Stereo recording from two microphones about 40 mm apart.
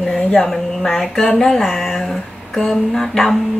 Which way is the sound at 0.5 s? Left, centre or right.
Centre.